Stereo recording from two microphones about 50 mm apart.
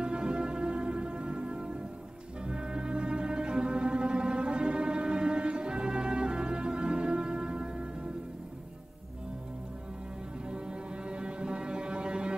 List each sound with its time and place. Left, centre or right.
0.0 s music: centre
10.5 s music: centre